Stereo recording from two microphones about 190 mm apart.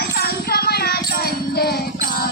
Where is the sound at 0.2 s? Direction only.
55° left (ahead or behind).